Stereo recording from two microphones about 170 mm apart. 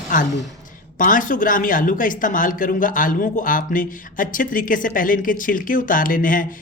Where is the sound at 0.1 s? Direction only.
50° left (ahead or behind).